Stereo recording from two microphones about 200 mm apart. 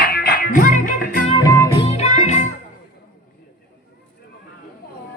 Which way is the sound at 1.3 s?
15° left (ahead or behind).